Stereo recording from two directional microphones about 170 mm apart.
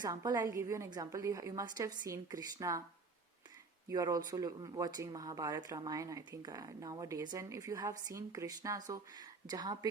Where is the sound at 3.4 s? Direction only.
20° right (ahead or behind).